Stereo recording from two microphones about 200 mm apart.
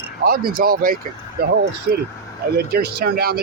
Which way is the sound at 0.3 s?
45° right (ahead or behind).